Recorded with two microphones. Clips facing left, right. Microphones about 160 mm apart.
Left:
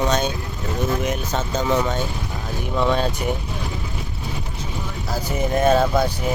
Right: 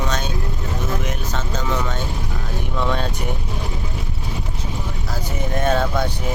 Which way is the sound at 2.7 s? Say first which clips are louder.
Left 3 dB; 5° left (ahead or behind).